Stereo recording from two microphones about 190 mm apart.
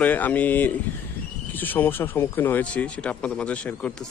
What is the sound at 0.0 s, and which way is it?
A man's voice, 10° left (ahead or behind).